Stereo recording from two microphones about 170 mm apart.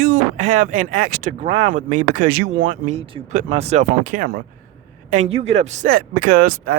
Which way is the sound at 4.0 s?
55° right (ahead or behind).